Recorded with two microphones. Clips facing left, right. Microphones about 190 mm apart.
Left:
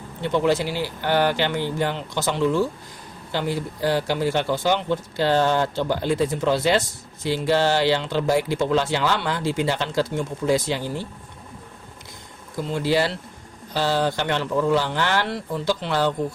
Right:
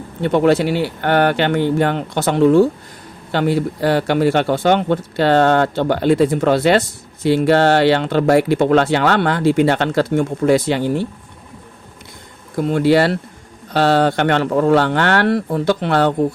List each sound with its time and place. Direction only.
0.2 s speech: 60° right (ahead or behind)
12.5 s speech: 65° right (ahead or behind)